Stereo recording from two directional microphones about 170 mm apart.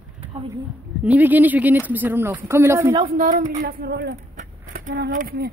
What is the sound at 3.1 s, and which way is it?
Speech, 50° right (ahead or behind).